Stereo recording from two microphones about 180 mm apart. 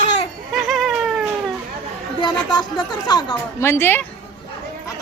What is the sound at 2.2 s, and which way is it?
A woman's voice, 25° left (ahead or behind).